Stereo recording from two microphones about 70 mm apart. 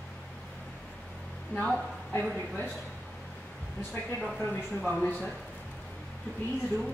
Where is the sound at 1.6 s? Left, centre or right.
Centre.